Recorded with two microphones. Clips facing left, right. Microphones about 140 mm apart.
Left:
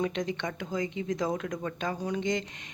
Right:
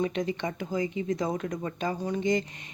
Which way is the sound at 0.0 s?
Centre (ahead or behind).